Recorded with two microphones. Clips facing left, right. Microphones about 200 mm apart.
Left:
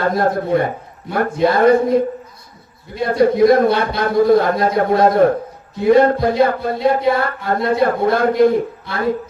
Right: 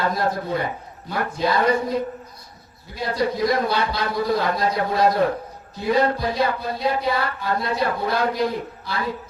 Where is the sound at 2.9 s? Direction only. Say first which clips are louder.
Left 9 dB; 55° left (ahead or behind).